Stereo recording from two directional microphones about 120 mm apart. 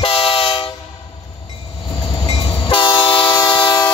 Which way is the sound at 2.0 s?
40° left (ahead or behind).